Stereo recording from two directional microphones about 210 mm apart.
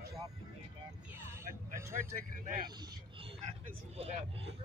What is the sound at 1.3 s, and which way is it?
Vehicle, 15° right (ahead or behind).